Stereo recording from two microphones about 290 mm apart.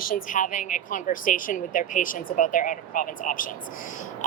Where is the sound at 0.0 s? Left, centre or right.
Left.